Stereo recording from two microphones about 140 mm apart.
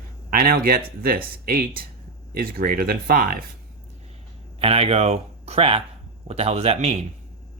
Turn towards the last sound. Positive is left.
turn(degrees=-50)  # may be behind; listen again after turning